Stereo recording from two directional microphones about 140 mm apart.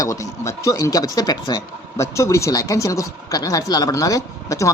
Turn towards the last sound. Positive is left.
turn(degrees=25)  # may be behind; listen again after turning